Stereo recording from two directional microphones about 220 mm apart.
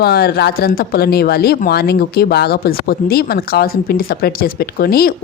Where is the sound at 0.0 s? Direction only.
45° left (ahead or behind).